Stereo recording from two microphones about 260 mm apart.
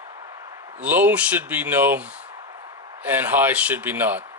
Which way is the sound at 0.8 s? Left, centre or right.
Centre.